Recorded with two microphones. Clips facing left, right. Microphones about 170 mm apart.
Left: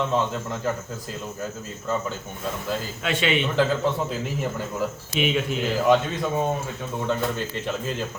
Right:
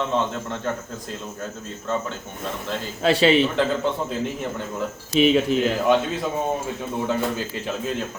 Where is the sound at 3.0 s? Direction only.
35° right (ahead or behind).